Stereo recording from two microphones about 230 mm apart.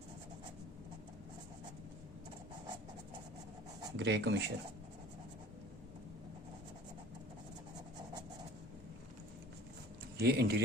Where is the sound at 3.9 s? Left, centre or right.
Right.